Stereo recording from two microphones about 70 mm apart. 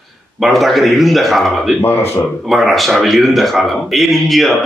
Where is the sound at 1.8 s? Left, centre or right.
Left.